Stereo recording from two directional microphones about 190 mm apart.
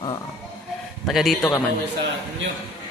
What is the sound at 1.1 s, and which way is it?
Speech, centre (ahead or behind).